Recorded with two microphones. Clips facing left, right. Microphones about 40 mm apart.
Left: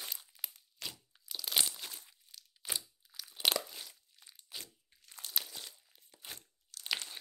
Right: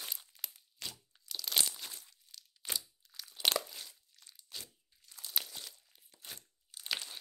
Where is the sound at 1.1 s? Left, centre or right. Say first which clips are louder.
Even; centre.